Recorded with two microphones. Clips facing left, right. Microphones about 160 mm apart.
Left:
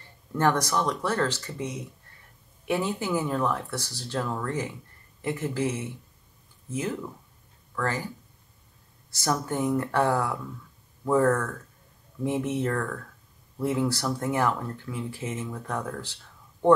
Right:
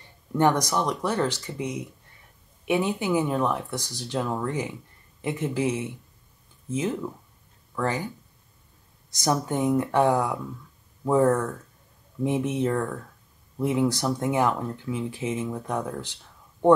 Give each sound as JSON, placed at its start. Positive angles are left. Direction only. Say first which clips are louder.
{"t": 0.3, "sound": "speech", "louder": "right 2 dB", "side_deg": -20}
{"t": 9.1, "sound": "speech", "louder": "right 3 dB", "side_deg": -20}